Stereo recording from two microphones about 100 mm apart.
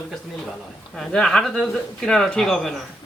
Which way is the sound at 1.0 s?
5° left (ahead or behind).